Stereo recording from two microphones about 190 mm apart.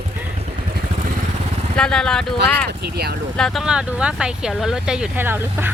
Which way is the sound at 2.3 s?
60° right (ahead or behind).